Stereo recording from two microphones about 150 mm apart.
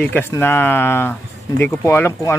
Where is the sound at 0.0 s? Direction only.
15° left (ahead or behind).